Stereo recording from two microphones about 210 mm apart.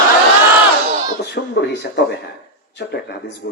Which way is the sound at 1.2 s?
50° left (ahead or behind).